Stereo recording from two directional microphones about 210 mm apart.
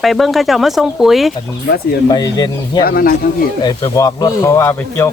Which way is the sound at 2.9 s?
45° left (ahead or behind).